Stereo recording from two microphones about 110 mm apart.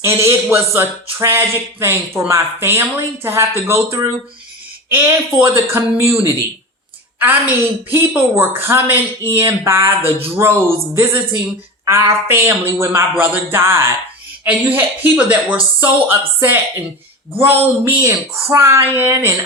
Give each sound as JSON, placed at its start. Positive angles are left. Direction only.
{"t": 0.0, "sound": "a man's voice", "side_deg": -25}
{"t": 7.2, "sound": "a man's voice", "side_deg": -15}
{"t": 10.0, "sound": "speech", "side_deg": -60}
{"t": 10.3, "sound": "a man's voice", "side_deg": -25}